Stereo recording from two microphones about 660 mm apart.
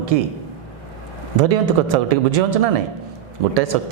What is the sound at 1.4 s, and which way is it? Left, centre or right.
A woman's voice, right.